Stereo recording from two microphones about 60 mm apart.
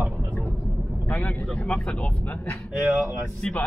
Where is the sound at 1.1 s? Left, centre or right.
Centre.